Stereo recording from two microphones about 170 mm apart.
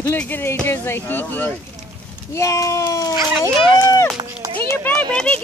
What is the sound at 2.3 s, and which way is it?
Speech, 20° left (ahead or behind).